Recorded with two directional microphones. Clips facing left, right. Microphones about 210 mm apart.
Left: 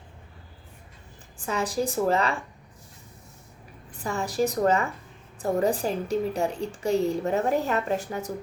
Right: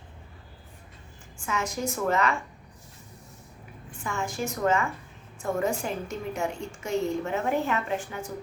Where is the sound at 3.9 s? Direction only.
35° left (ahead or behind).